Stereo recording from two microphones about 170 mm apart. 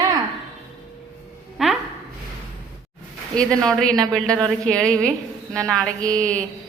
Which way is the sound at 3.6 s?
5° left (ahead or behind).